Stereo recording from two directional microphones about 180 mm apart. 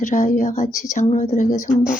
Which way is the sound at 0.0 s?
45° left (ahead or behind).